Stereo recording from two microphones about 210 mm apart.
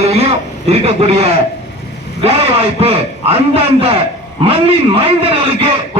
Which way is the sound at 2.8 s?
30° right (ahead or behind).